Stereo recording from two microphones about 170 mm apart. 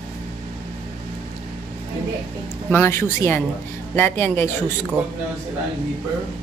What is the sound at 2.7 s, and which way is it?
Speech, 15° left (ahead or behind).